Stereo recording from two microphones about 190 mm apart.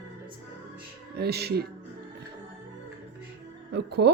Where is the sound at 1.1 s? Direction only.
60° right (ahead or behind).